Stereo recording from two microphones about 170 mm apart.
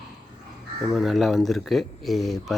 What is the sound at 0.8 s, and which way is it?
Speech, centre (ahead or behind).